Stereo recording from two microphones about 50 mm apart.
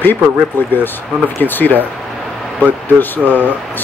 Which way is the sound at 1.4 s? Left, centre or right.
Left.